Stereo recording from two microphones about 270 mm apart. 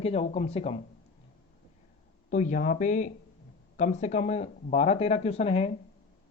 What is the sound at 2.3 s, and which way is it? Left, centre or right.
Speech, left.